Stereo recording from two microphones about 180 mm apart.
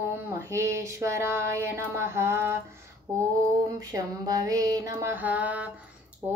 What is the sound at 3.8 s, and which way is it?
Mantra, 20° right (ahead or behind).